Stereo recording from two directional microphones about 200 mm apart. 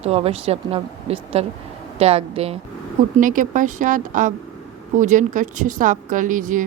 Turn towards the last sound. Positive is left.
turn(degrees=-40)  # may be behind; listen again after turning